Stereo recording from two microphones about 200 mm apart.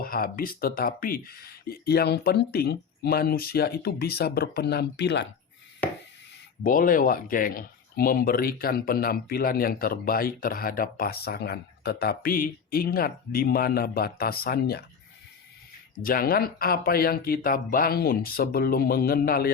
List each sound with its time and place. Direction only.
0.0 s speech: 45° left (ahead or behind)
6.6 s speech: 45° left (ahead or behind)
16.0 s speech: 45° left (ahead or behind)